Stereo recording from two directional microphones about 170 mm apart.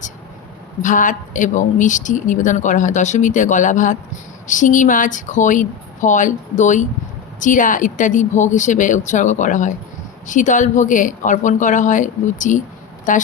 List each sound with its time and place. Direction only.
0.8 s a woman's voice: 50° left (ahead or behind)